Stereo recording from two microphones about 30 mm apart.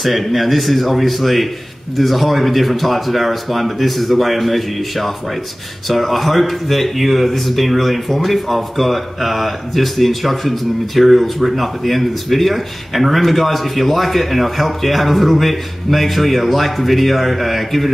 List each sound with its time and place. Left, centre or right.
0.0 s speech: centre